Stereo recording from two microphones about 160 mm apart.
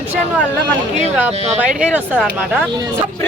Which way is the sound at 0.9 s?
45° right (ahead or behind).